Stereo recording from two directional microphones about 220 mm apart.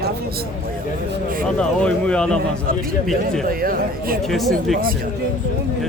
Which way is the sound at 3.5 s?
40° right (ahead or behind).